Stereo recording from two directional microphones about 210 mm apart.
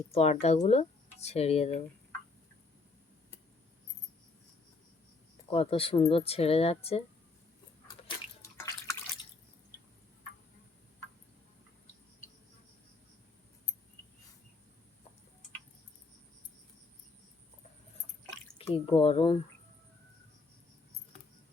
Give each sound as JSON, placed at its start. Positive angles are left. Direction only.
{"t": 0.1, "sound": "speech", "side_deg": 30}
{"t": 5.5, "sound": "speech", "side_deg": 25}
{"t": 8.0, "sound": "drip", "side_deg": 15}
{"t": 18.5, "sound": "drip", "side_deg": 25}
{"t": 19.0, "sound": "speech", "side_deg": 25}